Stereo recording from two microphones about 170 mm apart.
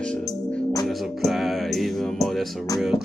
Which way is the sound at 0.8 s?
Centre (ahead or behind).